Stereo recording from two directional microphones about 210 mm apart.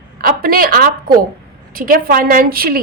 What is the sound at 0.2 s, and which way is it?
A woman's voice, 45° right (ahead or behind).